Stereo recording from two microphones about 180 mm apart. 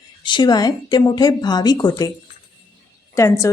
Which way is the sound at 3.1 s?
15° left (ahead or behind).